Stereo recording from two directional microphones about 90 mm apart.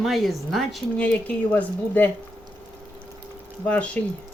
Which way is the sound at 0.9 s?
15° left (ahead or behind).